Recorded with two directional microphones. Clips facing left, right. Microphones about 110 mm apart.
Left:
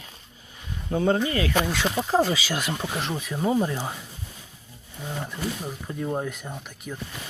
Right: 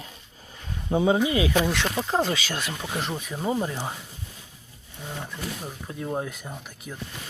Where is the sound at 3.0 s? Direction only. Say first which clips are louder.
Left 3 dB; centre (ahead or behind).